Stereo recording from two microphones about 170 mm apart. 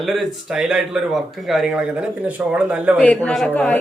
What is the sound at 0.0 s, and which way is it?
Speech, centre (ahead or behind).